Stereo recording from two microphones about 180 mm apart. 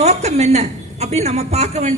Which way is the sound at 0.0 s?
40° right (ahead or behind).